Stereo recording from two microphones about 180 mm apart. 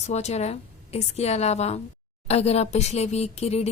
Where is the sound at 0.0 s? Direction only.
40° left (ahead or behind).